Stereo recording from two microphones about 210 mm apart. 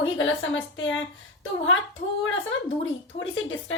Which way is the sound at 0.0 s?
65° left (ahead or behind).